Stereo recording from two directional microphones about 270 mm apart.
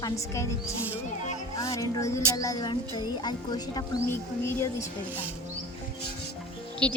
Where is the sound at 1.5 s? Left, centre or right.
Centre.